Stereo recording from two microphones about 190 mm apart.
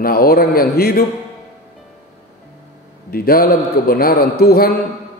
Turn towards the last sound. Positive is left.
turn(degrees=55)  # may be behind; listen again after turning